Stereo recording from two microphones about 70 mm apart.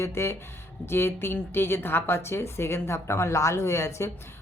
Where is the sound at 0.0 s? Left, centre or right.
Left.